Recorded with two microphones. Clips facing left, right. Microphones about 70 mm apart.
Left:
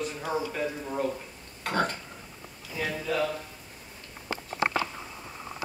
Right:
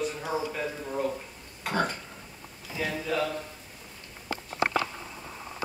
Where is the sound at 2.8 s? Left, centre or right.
Centre.